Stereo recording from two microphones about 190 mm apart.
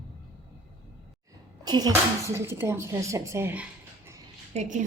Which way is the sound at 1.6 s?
20° right (ahead or behind).